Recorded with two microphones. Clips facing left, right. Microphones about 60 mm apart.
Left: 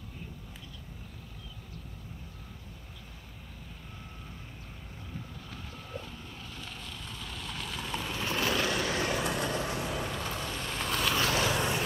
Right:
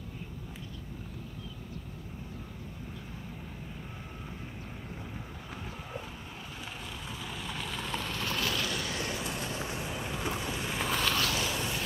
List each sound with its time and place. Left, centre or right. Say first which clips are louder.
7.2 s vehicle: right 1 dB; centre
8.3 s vehicle: left 4 dB; left
8.6 s vehicle: left 4 dB; left
8.9 s vehicle: left 5 dB; left
10.1 s boat: right 1 dB; centre
11.3 s a sound: left 4 dB; left